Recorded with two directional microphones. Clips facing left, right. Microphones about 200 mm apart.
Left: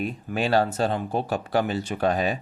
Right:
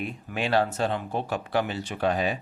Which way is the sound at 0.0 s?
40° left (ahead or behind).